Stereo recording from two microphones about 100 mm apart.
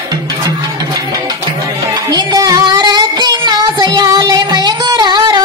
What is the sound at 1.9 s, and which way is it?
Music, 45° right (ahead or behind).